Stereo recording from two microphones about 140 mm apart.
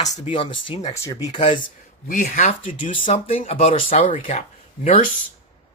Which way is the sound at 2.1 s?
65° left (ahead or behind).